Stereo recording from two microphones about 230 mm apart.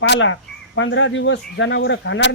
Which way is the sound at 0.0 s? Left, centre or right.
Left.